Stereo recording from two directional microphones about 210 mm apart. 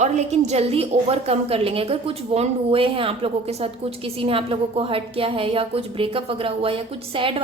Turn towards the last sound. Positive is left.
turn(degrees=-25)  # may be behind; listen again after turning